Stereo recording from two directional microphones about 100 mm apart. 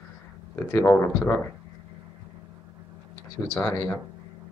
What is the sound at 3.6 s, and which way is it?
Speech, 20° left (ahead or behind).